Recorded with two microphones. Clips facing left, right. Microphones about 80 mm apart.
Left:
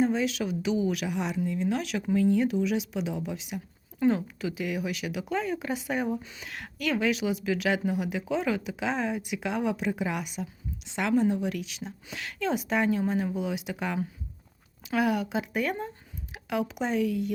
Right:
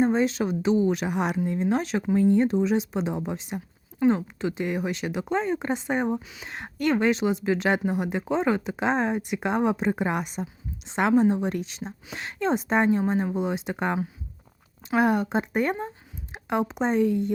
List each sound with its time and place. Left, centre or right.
0.0 s speech: right
1.1 s speech: right
1.7 s speech: right
4.0 s speech: right
6.2 s speech: centre
6.8 s speech: right